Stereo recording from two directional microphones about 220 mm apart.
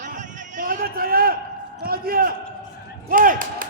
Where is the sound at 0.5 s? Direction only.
40° right (ahead or behind).